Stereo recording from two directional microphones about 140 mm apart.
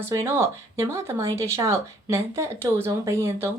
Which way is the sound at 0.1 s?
20° right (ahead or behind).